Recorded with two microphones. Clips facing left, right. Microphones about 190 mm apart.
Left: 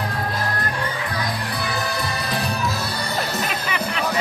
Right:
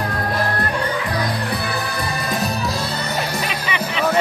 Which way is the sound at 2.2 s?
40° right (ahead or behind).